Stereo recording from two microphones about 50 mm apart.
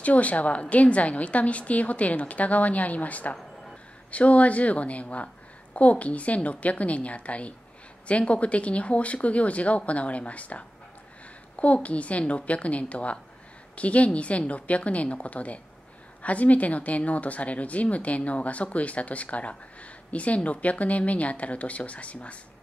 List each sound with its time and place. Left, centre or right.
0.0 s speech: left